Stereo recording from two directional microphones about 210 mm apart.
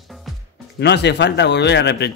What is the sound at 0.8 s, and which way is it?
Speech, 55° left (ahead or behind).